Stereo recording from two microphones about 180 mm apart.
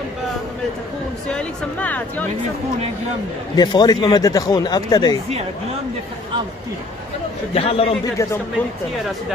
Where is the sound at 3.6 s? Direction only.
25° left (ahead or behind).